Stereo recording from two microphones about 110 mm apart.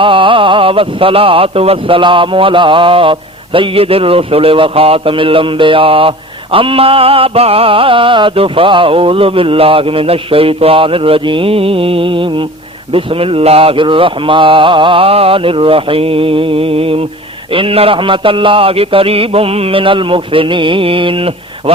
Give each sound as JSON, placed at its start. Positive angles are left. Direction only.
{"t": 0.0, "sound": "speech", "side_deg": -50}